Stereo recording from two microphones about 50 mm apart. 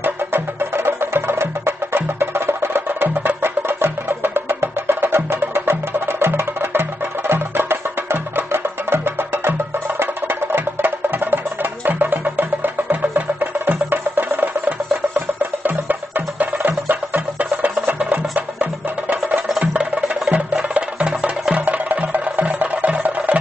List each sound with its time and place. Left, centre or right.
0.0 s music: right